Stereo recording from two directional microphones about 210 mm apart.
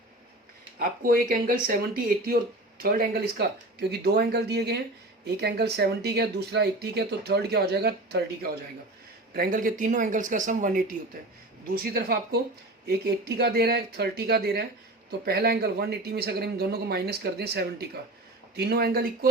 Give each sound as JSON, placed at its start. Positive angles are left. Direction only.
{"t": 0.8, "sound": "speech", "side_deg": -45}